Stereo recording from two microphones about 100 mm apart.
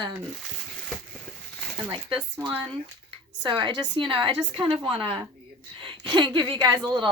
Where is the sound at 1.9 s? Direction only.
60° right (ahead or behind).